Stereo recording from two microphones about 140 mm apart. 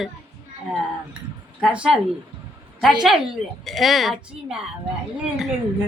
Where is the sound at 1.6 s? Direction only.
5° right (ahead or behind).